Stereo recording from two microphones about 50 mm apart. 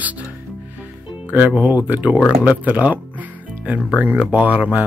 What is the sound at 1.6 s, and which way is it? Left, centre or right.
Speech, right.